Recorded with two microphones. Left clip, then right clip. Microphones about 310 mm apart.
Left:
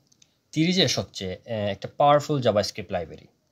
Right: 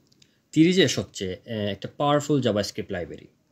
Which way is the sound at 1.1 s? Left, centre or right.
Left.